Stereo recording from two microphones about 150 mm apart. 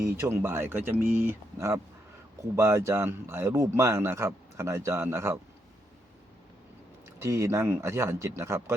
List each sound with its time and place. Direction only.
0.0 s speech: 15° right (ahead or behind)
7.2 s speech: 20° right (ahead or behind)